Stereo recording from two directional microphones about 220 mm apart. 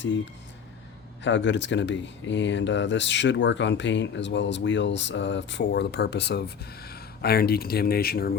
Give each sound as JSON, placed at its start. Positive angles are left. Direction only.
{"t": 1.2, "sound": "speech", "side_deg": 55}